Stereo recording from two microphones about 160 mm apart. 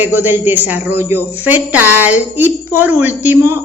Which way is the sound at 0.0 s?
10° right (ahead or behind).